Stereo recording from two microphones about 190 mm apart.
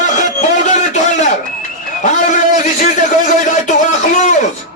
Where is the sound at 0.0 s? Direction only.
40° left (ahead or behind).